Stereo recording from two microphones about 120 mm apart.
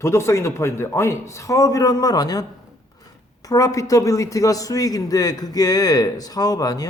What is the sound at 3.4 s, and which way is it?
A man's voice, 30° left (ahead or behind).